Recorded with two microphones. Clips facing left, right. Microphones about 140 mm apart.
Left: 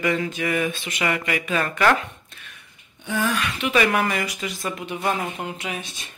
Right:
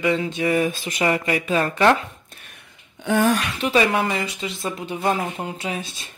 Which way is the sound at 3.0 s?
60° right (ahead or behind).